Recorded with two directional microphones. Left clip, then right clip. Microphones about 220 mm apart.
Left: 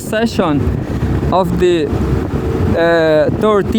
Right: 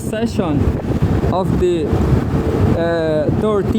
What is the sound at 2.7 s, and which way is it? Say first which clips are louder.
Speech: left 8 dB; 40° left (ahead or behind).